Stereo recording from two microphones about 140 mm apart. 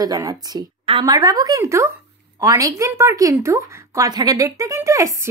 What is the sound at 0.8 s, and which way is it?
Speech, 40° right (ahead or behind).